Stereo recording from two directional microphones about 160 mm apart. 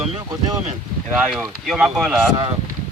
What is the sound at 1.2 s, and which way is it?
Speech, centre (ahead or behind).